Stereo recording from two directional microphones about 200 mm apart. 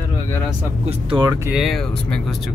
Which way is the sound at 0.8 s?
20° right (ahead or behind).